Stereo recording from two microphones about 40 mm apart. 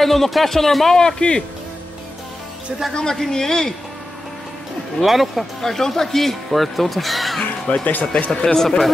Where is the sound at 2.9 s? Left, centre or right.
Centre.